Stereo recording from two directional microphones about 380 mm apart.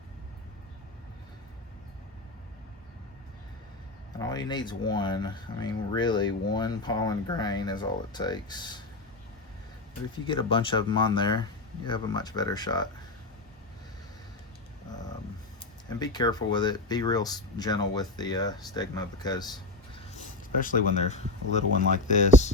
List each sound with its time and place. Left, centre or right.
4.2 s speech: centre
10.2 s speech: centre
15.9 s speech: centre
20.6 s speech: centre